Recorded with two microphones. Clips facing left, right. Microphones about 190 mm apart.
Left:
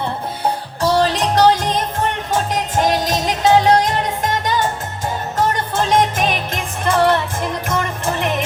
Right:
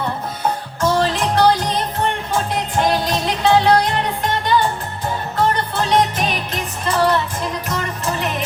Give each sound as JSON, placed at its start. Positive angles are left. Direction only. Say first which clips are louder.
{"t": 0.8, "sound": "music", "louder": "left 2 dB", "side_deg": 35}